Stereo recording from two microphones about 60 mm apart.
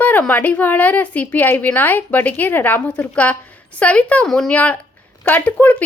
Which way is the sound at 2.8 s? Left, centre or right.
Centre.